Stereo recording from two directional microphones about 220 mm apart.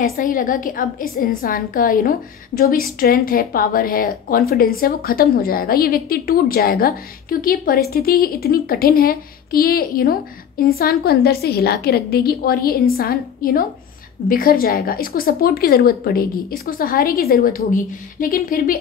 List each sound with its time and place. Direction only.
0.1 s a woman's voice: 40° left (ahead or behind)